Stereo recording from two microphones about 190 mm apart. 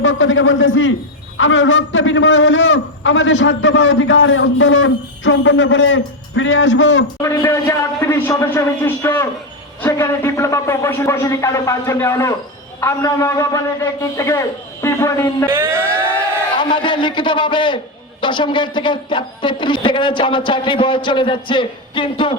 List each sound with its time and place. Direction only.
0.0 s a man's voice: 80° left
7.2 s a man's voice: 15° left (ahead or behind)
15.4 s a sound: 10° right (ahead or behind)
16.6 s speech: 25° left (ahead or behind)